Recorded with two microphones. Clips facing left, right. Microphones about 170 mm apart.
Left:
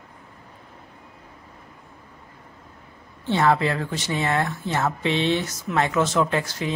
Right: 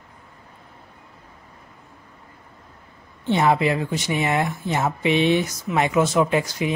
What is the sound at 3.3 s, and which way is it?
Speech, 15° right (ahead or behind).